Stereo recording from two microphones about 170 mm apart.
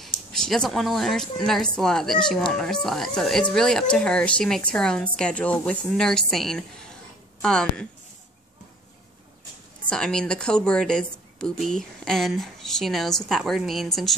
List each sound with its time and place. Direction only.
0.0 s a woman's voice: centre (ahead or behind)
9.8 s speech: 5° left (ahead or behind)